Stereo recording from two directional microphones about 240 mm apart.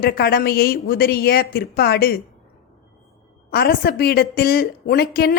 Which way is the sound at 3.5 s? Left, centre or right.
Left.